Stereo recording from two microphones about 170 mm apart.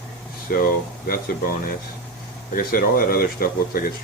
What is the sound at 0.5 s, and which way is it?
Speech, 60° left (ahead or behind).